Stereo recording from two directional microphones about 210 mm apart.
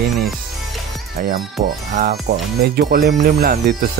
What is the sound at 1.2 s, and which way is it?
Speech, 40° right (ahead or behind).